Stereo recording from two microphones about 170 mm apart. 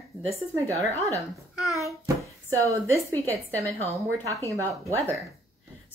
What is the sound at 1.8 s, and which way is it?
A child's voice, 20° right (ahead or behind).